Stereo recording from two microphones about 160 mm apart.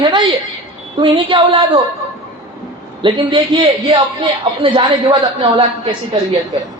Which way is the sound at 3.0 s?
30° right (ahead or behind).